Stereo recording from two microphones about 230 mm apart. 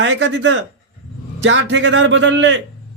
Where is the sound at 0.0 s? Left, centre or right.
Right.